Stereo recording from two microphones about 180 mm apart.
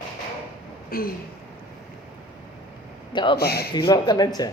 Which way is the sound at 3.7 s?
25° left (ahead or behind).